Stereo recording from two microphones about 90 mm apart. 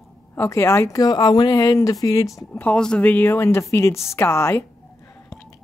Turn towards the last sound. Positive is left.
turn(degrees=30)  # may be behind; listen again after turning